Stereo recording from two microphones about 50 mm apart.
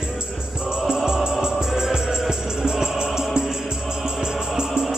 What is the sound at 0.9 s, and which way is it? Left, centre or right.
Music, centre.